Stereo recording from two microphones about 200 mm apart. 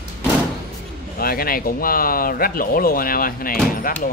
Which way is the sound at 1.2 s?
50° left (ahead or behind).